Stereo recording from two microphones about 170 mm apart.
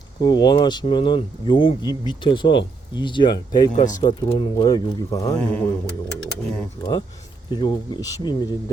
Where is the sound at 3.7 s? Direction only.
50° left (ahead or behind).